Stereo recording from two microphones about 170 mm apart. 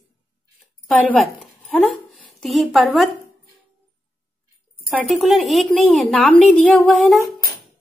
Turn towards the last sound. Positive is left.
turn(degrees=0)  # may be behind; listen again after turning